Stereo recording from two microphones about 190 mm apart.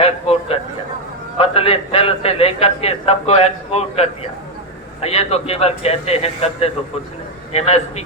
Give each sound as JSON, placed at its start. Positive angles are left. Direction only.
{"t": 0.0, "sound": "a man's voice", "side_deg": 30}